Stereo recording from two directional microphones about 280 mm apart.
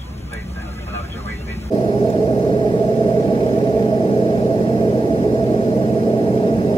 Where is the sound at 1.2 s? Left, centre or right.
Centre.